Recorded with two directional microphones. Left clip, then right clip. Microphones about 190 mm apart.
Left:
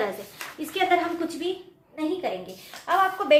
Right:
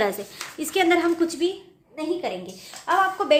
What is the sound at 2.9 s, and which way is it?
Speech, 35° right (ahead or behind).